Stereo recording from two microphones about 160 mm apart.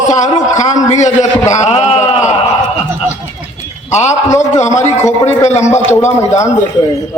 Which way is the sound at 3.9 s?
45° left (ahead or behind).